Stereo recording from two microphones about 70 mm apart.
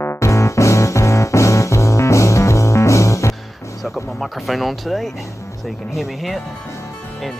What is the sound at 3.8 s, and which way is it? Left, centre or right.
Speech, centre.